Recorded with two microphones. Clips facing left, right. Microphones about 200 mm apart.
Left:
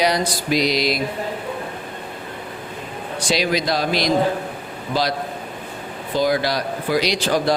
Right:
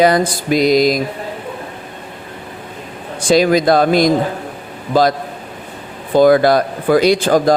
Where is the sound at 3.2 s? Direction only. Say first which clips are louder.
Right 9 dB; 50° right (ahead or behind).